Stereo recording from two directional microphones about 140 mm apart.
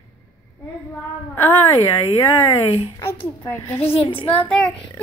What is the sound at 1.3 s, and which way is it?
Speech, 15° left (ahead or behind).